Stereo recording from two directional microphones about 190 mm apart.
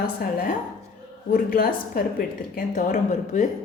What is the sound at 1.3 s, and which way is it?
Speech, 50° left (ahead or behind).